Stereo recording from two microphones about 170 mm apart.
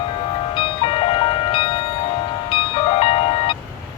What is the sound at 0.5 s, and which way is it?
Music, 30° left (ahead or behind).